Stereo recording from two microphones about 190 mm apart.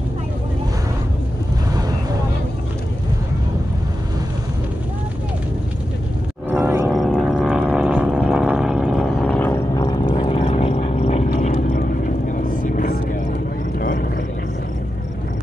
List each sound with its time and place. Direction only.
6.6 s roaring cats: 15° right (ahead or behind)
6.9 s vehicle: centre (ahead or behind); by 10.0 s 15° left (ahead or behind)
10.0 s vehicle: 30° left (ahead or behind); by 14.0 s 50° left (ahead or behind)